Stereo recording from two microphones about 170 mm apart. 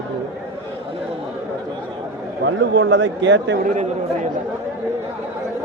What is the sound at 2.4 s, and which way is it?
A man's voice, 90° right.